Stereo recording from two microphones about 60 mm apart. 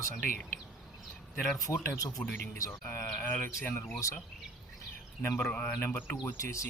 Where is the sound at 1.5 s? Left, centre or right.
Left.